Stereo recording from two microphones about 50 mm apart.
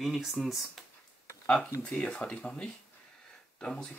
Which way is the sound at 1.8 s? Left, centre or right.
Centre.